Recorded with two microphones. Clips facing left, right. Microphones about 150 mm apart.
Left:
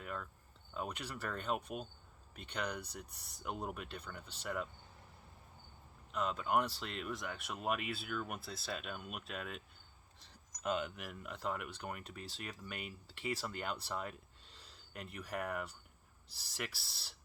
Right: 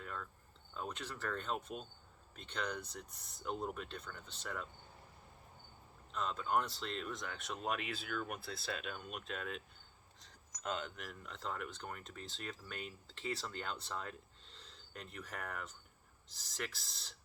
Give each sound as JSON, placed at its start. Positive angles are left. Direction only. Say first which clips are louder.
{"t": 0.0, "sound": "cricket", "louder": "left 2 dB", "side_deg": 10}
{"t": 0.7, "sound": "speech", "louder": "left 2 dB", "side_deg": 10}
{"t": 6.1, "sound": "speech", "louder": "left 2 dB", "side_deg": 10}